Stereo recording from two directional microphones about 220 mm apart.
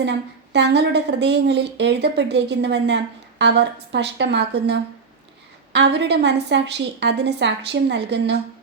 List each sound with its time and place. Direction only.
0.5 s a woman's voice: 50° right (ahead or behind)